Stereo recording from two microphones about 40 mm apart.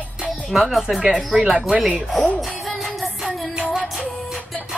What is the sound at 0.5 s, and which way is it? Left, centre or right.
Speech, centre.